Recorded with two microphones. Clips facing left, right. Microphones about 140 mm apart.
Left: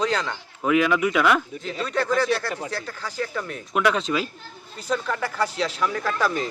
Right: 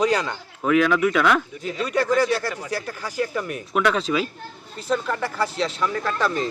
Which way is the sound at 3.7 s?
Centre (ahead or behind).